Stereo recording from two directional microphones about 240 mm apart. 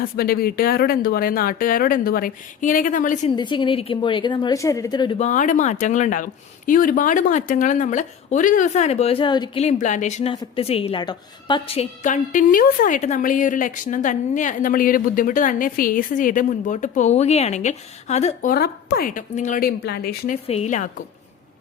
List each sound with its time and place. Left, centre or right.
0.2 s a woman's voice: left
3.3 s a woman's voice: centre
18.5 s a woman's voice: left
20.3 s a woman's voice: left